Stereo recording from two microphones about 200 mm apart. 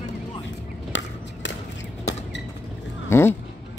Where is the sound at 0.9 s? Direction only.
65° left (ahead or behind).